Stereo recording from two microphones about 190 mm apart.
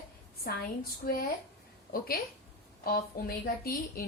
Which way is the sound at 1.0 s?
50° left (ahead or behind).